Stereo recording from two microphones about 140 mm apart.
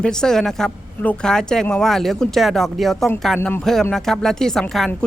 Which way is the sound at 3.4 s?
15° left (ahead or behind).